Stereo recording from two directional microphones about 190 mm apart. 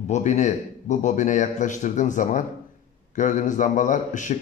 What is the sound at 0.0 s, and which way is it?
A man's voice, 40° left (ahead or behind).